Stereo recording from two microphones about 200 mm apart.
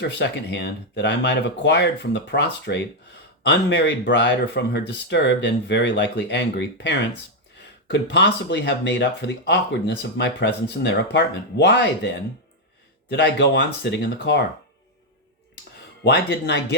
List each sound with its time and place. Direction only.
0.0 s speech: 60° left (ahead or behind)
13.1 s speech: 55° left (ahead or behind)
16.0 s speech: 55° left (ahead or behind)